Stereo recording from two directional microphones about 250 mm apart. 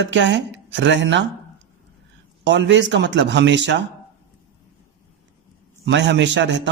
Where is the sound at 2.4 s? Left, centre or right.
Right.